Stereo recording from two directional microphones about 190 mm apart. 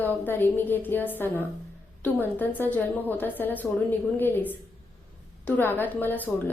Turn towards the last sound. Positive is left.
turn(degrees=10)  # may be behind; listen again after turning